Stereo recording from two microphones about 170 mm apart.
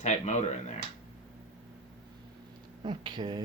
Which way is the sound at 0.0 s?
45° left (ahead or behind).